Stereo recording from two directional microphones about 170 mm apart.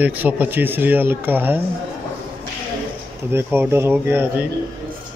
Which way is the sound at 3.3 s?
15° right (ahead or behind).